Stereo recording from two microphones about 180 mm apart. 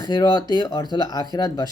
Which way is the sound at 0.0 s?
20° left (ahead or behind).